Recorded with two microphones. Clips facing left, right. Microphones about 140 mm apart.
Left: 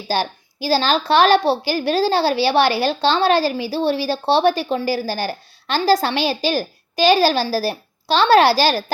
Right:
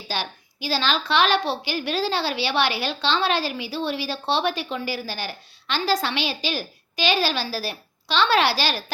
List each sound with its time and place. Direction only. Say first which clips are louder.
0.1 s a woman's voice: left 8 dB; 40° left (ahead or behind)